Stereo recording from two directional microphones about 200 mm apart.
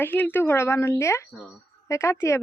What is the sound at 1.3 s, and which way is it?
Speech, centre (ahead or behind).